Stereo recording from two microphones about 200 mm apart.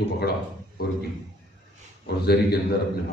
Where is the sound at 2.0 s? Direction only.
55° left (ahead or behind).